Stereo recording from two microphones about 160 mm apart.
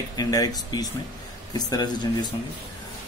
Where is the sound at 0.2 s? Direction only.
25° left (ahead or behind).